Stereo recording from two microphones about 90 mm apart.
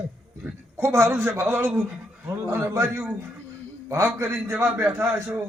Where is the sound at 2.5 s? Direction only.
30° right (ahead or behind).